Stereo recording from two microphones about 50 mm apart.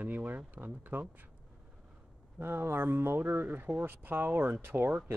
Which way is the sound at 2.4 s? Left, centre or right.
Right.